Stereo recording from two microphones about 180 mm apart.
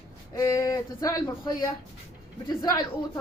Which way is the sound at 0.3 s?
20° left (ahead or behind).